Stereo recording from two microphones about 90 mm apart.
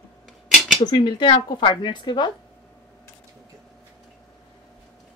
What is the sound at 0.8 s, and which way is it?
Speech, 55° left (ahead or behind).